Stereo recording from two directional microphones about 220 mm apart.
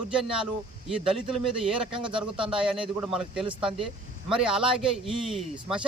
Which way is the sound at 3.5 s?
25° right (ahead or behind).